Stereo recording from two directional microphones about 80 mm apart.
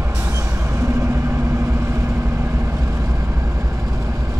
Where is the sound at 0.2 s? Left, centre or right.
Right.